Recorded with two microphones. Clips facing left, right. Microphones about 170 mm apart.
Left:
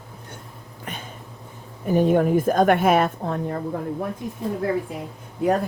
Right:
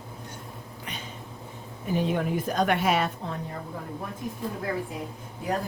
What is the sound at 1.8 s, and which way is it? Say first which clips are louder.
A woman's voice: left 8 dB; 50° left (ahead or behind).